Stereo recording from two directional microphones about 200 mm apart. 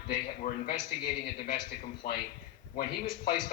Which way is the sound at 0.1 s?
45° left (ahead or behind).